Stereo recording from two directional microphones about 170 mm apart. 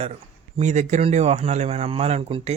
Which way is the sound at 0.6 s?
45° right (ahead or behind).